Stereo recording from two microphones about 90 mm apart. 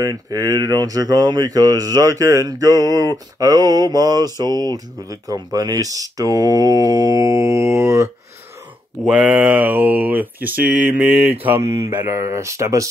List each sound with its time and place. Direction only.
0.0 s speech: 40° right (ahead or behind)
9.0 s speech: 15° right (ahead or behind)
11.6 s speech: 35° right (ahead or behind)